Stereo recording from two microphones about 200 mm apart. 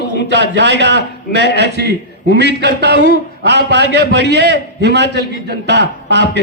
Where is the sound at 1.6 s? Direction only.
55° right (ahead or behind).